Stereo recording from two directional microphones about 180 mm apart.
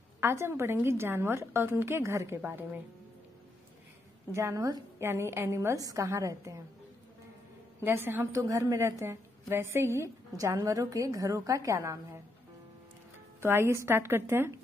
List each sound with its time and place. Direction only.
0.2 s a woman's voice: 15° right (ahead or behind)
4.3 s a woman's voice: 15° right (ahead or behind)
7.8 s a woman's voice: 10° right (ahead or behind)
13.4 s a woman's voice: 15° right (ahead or behind)